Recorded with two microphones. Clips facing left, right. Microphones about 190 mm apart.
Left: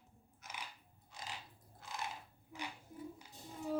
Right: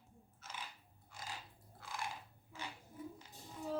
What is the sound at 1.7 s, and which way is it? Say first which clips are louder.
Biting: even; 20° left (ahead or behind).